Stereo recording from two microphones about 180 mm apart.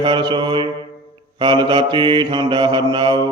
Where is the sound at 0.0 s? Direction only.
25° right (ahead or behind).